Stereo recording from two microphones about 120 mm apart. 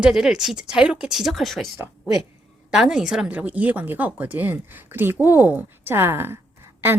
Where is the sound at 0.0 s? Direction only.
5° right (ahead or behind).